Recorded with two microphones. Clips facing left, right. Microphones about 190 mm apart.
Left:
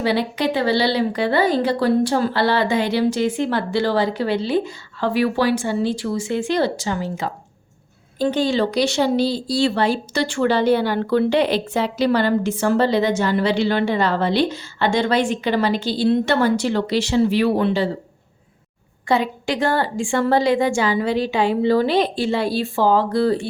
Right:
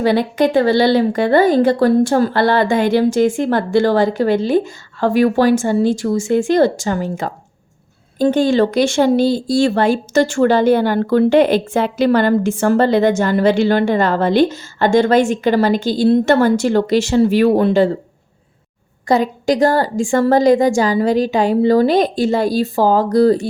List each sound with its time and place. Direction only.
0.0 s speech: 50° right (ahead or behind)
19.0 s a woman's voice: 40° right (ahead or behind)